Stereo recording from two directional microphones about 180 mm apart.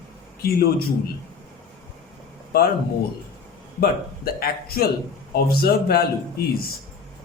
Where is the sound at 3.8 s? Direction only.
55° left (ahead or behind).